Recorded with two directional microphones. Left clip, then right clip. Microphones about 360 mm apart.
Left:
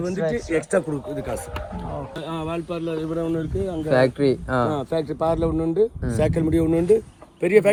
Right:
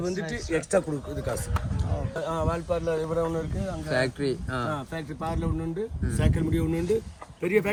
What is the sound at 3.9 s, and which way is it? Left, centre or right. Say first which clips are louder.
Speech: left 8 dB; centre.